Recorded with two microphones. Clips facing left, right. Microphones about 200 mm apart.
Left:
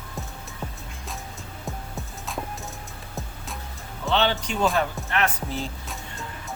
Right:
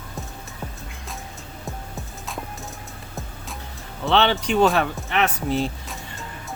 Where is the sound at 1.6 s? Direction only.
Centre (ahead or behind).